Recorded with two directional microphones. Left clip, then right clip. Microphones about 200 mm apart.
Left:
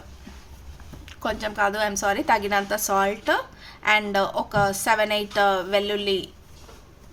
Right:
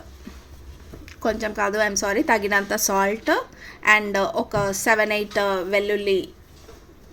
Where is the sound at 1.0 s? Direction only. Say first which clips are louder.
Right 3 dB; 10° right (ahead or behind).